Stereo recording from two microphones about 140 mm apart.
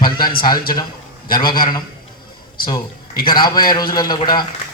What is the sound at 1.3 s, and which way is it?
Speech, 30° left (ahead or behind).